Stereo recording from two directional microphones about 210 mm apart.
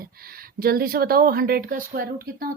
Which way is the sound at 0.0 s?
45° right (ahead or behind).